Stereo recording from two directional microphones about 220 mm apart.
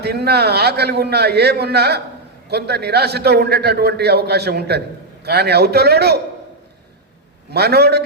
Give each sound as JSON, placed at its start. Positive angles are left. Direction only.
{"t": 0.0, "sound": "a man's voice", "side_deg": -45}
{"t": 7.5, "sound": "a man's voice", "side_deg": -45}